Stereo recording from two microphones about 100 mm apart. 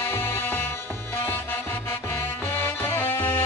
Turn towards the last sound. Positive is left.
turn(degrees=20)  # may be behind; listen again after turning